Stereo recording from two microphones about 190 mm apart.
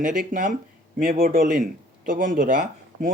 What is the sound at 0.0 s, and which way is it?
Speech, 45° right (ahead or behind).